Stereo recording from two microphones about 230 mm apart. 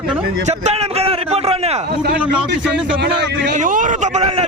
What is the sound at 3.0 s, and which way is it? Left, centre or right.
Speech, right.